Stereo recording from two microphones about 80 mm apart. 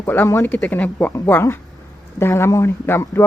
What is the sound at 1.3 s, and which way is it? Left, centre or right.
Speech, left.